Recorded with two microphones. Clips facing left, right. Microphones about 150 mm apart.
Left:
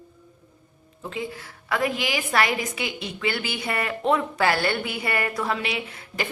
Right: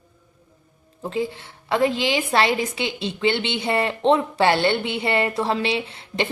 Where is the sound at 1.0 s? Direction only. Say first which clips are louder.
Right 6 dB; 30° right (ahead or behind).